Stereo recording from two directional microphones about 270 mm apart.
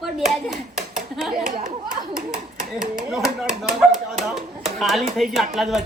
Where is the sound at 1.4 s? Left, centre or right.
Right.